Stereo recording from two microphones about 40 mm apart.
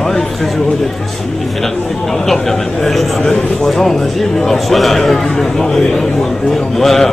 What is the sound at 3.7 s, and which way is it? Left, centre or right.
A man's voice, centre.